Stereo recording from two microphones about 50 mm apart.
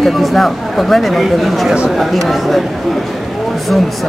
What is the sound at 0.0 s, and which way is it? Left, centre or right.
Speech, centre.